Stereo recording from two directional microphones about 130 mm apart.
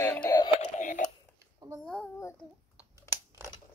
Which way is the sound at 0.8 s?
75° left (ahead or behind).